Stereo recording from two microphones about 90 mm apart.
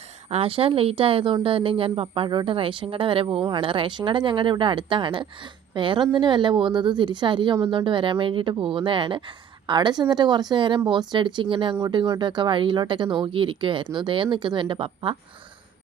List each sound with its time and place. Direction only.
0.4 s a woman's voice: 90° right; by 11.8 s 70° right (ahead or behind)
12.2 s speech: 60° right (ahead or behind); by 15.1 s 80° right